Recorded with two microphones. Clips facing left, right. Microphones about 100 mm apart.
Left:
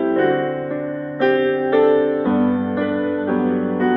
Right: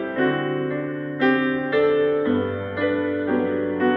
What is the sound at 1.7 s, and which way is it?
Music, 30° left (ahead or behind).